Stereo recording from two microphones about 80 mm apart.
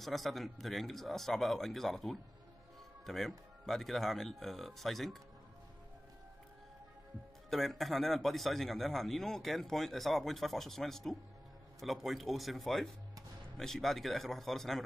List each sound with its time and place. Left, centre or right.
0.0 s a man's voice: centre
7.4 s a man's voice: centre